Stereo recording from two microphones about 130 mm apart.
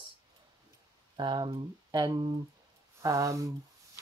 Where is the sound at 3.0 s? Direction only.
25° right (ahead or behind).